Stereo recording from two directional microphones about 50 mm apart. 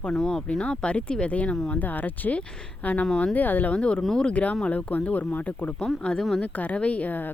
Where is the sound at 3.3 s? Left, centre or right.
Left.